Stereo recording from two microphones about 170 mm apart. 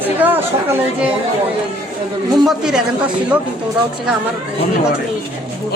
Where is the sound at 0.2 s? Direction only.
10° right (ahead or behind).